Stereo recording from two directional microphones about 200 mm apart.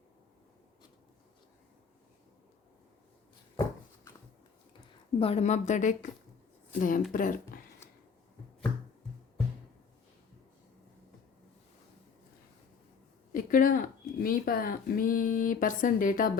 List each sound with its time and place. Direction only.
5.2 s a woman's voice: 30° left (ahead or behind)
13.3 s speech: 45° left (ahead or behind)